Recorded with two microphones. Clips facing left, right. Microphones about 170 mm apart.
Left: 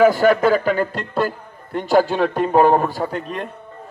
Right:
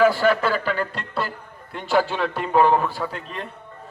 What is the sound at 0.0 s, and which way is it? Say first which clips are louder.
A man's voice: left 4 dB; 45° left (ahead or behind).